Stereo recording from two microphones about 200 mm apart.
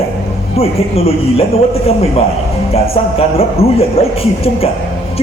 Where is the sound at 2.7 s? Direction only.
30° left (ahead or behind).